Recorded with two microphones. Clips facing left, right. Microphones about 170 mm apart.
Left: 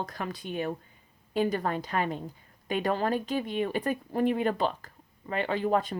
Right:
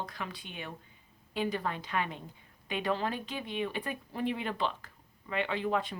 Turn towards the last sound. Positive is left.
turn(degrees=40)  # may be behind; listen again after turning